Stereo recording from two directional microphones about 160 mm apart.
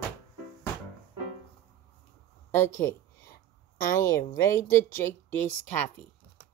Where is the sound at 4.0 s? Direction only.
15° left (ahead or behind).